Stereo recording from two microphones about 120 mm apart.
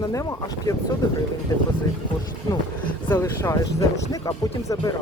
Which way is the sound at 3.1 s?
25° left (ahead or behind).